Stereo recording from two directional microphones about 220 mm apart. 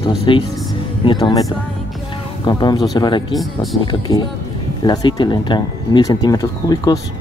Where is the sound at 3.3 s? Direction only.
Centre (ahead or behind).